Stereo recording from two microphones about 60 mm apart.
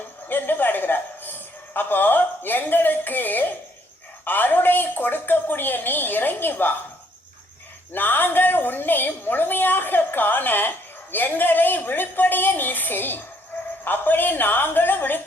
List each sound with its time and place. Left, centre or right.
0.3 s a sound: left
1.7 s a woman's voice: left
7.9 s a woman's voice: left